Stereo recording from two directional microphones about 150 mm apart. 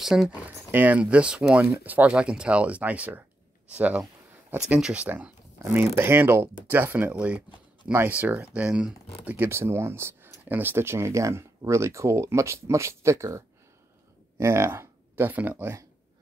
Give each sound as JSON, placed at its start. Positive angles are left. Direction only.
{"t": 0.0, "sound": "speech", "side_deg": -5}
{"t": 14.4, "sound": "speech", "side_deg": -20}